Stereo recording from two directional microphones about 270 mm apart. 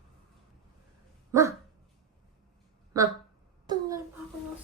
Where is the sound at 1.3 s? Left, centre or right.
Centre.